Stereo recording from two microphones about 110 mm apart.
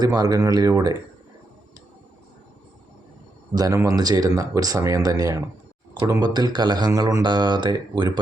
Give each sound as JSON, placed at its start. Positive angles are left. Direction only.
{"t": 0.0, "sound": "speech", "side_deg": -35}
{"t": 3.5, "sound": "speech", "side_deg": -35}